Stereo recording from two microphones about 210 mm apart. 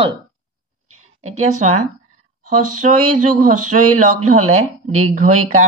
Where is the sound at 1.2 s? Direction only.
35° right (ahead or behind).